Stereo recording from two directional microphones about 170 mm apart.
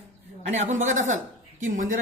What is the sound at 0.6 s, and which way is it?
A woman's voice, 45° right (ahead or behind).